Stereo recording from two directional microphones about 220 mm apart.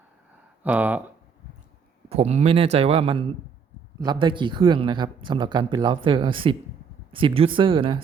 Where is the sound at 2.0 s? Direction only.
30° right (ahead or behind).